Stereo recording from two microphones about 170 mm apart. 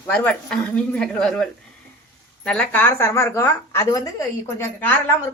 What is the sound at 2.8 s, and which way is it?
A woman's voice, 15° left (ahead or behind).